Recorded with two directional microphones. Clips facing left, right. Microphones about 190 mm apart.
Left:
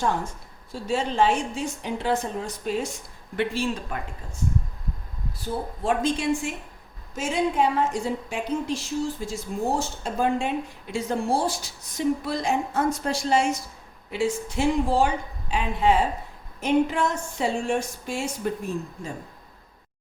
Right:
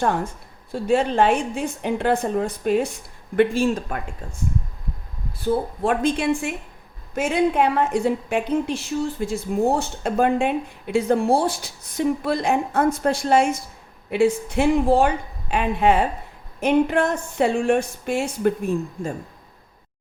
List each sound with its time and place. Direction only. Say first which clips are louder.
0.7 s speech: right 7 dB; 55° right (ahead or behind)
3.3 s speech: right 8 dB; 45° right (ahead or behind)
5.8 s speech: right 1 dB; 55° right (ahead or behind)